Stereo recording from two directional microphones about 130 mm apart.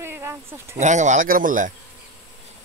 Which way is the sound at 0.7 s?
70° right (ahead or behind).